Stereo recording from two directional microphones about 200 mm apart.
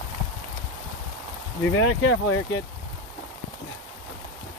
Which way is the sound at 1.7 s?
90° left.